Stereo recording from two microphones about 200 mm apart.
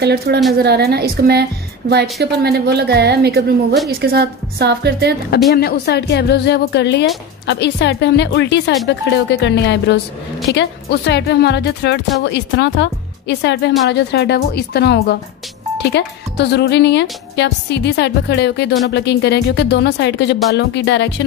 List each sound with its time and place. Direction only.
0.0 s a woman's voice: 55° right (ahead or behind)
5.5 s speech: 55° left (ahead or behind)